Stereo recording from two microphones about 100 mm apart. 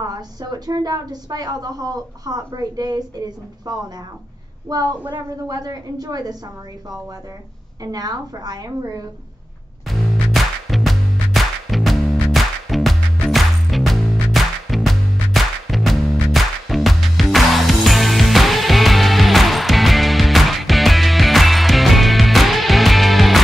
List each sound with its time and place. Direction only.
0.0 s a woman's voice: 40° right (ahead or behind)
7.8 s a woman's voice: 40° right (ahead or behind)
9.9 s music: centre (ahead or behind)